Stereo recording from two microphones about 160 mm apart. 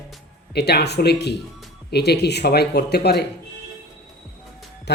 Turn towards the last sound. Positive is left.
turn(degrees=90)